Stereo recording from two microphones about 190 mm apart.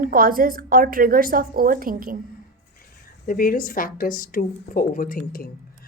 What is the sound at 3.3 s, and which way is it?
Speech, 50° left (ahead or behind).